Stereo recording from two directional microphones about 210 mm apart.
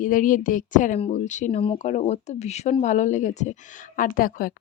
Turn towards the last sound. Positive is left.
turn(degrees=40)  # may be behind; listen again after turning